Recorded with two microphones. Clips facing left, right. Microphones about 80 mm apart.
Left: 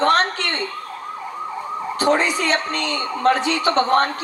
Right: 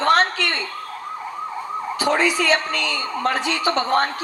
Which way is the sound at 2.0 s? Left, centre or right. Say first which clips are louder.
Left 1 dB; left.